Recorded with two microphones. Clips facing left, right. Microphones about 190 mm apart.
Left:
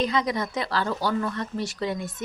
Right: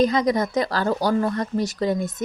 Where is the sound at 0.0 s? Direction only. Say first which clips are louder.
Right 6 dB; 45° right (ahead or behind).